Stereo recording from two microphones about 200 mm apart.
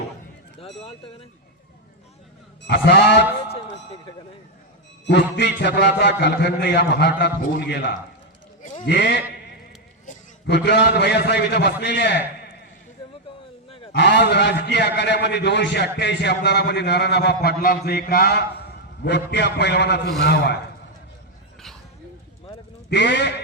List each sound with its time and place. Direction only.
0.6 s speech: 30° left (ahead or behind)
2.6 s a man's voice: 55° left (ahead or behind)
5.0 s a man's voice: 60° left (ahead or behind)
10.4 s a man's voice: 60° left (ahead or behind)
13.7 s a sound: 25° left (ahead or behind)
13.9 s a man's voice: 60° left (ahead or behind)
22.9 s a man's voice: 60° left (ahead or behind)